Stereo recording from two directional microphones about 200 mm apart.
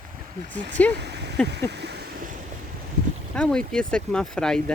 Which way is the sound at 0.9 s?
55° right (ahead or behind).